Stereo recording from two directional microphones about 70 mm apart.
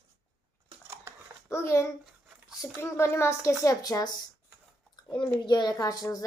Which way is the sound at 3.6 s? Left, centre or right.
Left.